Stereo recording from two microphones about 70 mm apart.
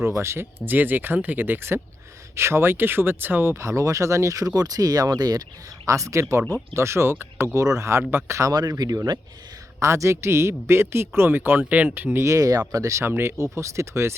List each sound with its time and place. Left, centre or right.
0.2 s speech: right
0.6 s speech: right
5.8 s speech: right
8.8 s speech: right
9.8 s speech: right
12.2 s speech: right
13.1 s speech: right